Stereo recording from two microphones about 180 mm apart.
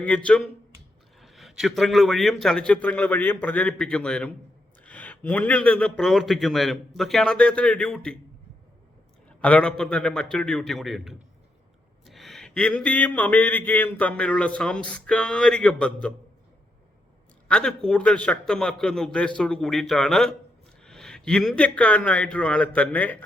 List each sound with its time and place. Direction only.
0.0 s a man's voice: 5° left (ahead or behind)
9.4 s speech: 5° left (ahead or behind)
17.5 s a man's voice: 5° left (ahead or behind)